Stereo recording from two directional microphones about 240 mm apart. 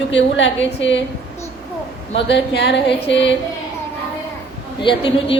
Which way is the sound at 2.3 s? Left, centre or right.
Left.